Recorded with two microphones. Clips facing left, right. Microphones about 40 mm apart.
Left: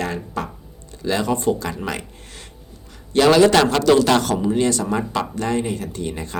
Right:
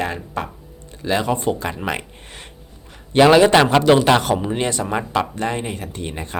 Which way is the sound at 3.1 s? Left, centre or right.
Right.